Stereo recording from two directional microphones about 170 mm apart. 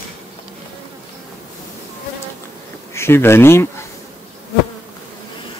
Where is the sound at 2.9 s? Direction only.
15° left (ahead or behind).